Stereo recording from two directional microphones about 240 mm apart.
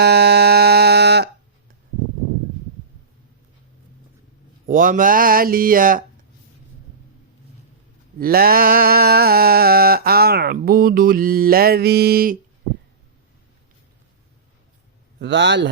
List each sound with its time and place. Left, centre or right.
0.0 s a sound: right
4.6 s mantra: right
8.2 s mantra: right
15.2 s a man's voice: right